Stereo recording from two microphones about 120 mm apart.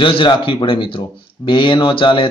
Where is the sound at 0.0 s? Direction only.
45° left (ahead or behind).